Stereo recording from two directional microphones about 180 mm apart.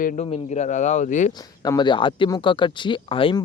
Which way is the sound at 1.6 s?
25° left (ahead or behind).